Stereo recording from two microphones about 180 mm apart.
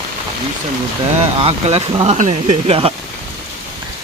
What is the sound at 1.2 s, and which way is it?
Speech, 35° right (ahead or behind).